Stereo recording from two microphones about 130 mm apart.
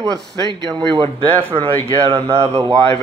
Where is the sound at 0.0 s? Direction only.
30° right (ahead or behind).